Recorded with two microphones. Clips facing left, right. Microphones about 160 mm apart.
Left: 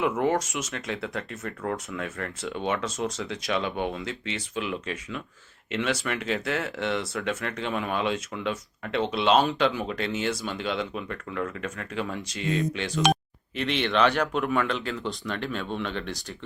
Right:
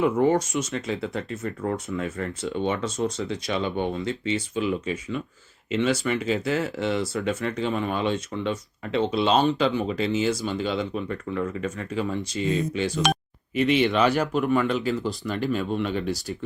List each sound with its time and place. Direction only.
0.0 s speech: centre (ahead or behind)